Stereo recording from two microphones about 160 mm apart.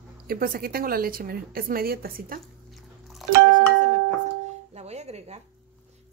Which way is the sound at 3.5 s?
50° right (ahead or behind).